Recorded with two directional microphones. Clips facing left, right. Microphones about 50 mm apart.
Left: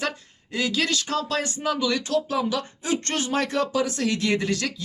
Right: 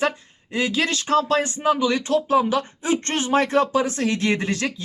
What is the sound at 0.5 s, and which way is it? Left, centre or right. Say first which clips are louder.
A man's voice: right 2 dB; right.